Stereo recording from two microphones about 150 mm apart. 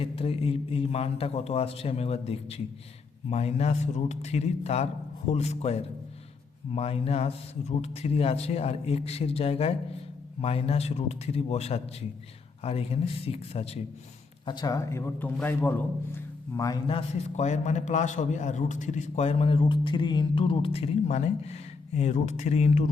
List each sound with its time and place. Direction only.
0.0 s a man's voice: 40° left (ahead or behind)
14.4 s a man's voice: 30° left (ahead or behind)
16.8 s a man's voice: 40° left (ahead or behind)